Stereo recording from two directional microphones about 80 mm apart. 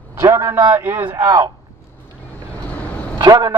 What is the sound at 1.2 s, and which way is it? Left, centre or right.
Speech, right.